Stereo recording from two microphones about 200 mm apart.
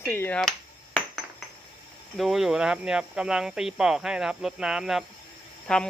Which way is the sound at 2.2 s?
Centre (ahead or behind).